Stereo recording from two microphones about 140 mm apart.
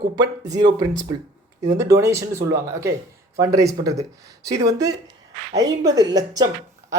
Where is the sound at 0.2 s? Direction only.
25° right (ahead or behind).